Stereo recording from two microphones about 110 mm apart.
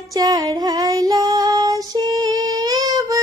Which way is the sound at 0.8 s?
35° right (ahead or behind).